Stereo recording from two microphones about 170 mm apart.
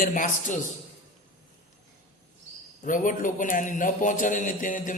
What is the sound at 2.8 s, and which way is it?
A man's voice, 50° left (ahead or behind).